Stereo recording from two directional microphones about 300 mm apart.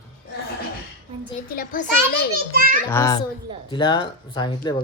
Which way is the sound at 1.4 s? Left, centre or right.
Left.